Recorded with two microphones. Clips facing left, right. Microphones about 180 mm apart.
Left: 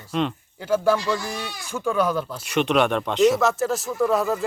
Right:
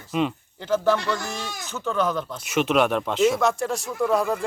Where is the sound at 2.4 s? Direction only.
Centre (ahead or behind).